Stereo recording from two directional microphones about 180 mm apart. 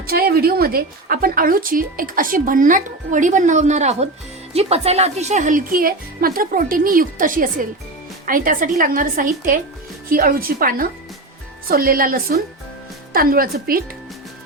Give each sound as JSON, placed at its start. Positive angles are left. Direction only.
{"t": 0.1, "sound": "a woman's voice", "side_deg": -60}